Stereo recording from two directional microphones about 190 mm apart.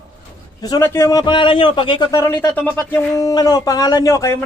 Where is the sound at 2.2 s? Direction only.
15° left (ahead or behind).